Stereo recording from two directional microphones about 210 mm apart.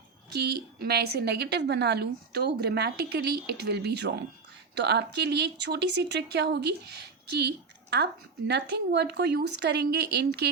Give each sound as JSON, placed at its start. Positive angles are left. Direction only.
{"t": 0.3, "sound": "speech", "side_deg": -50}